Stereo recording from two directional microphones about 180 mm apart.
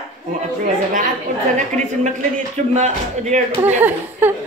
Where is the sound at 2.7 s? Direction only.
40° right (ahead or behind).